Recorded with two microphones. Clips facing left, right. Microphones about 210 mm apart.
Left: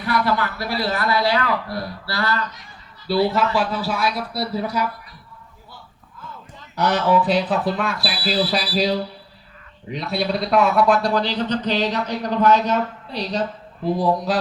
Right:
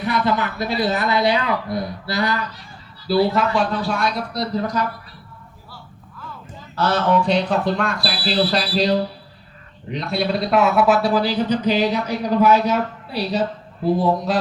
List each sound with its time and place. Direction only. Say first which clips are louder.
0.0 s speech: right 1 dB; 20° right (ahead or behind)
3.3 s speech: right 1 dB; 5° left (ahead or behind)
6.7 s a sound: even; 15° left (ahead or behind)
7.1 s a man's voice: even; 5° left (ahead or behind)